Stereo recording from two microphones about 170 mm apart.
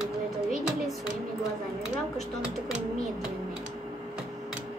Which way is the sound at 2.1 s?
5° right (ahead or behind).